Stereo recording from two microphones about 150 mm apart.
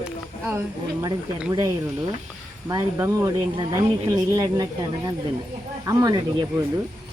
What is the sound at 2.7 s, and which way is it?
Speech, 20° right (ahead or behind).